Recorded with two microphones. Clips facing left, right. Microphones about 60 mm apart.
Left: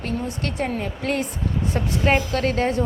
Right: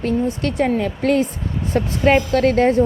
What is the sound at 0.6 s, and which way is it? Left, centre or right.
A woman's voice, right.